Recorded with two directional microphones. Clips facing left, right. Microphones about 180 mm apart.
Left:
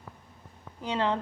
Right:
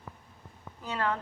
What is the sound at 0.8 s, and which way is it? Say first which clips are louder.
Speech: left 3 dB; 20° left (ahead or behind).